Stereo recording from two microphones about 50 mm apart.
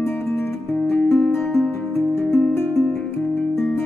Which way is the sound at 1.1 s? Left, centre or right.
Centre.